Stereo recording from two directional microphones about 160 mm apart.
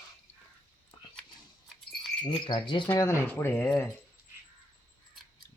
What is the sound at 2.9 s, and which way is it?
Speech, 15° left (ahead or behind).